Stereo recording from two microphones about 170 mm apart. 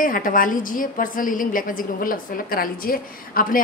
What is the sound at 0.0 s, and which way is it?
A woman's voice, 55° left (ahead or behind).